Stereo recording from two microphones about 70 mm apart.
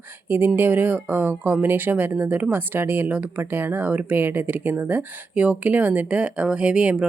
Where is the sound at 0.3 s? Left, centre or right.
Right.